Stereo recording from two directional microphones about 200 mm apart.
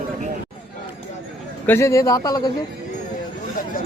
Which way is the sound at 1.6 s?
15° left (ahead or behind).